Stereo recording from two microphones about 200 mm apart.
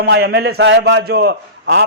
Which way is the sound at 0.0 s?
55° right (ahead or behind).